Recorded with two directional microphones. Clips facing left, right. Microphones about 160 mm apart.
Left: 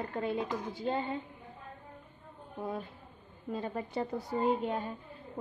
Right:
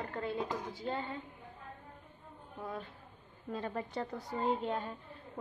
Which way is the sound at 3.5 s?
5° left (ahead or behind).